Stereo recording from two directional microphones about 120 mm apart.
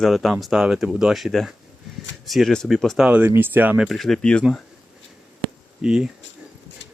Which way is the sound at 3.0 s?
15° right (ahead or behind).